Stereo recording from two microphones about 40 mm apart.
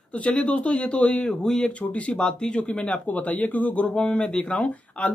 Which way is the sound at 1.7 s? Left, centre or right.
Left.